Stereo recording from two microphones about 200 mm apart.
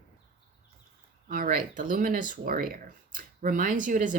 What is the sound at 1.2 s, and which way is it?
Speech, 45° right (ahead or behind).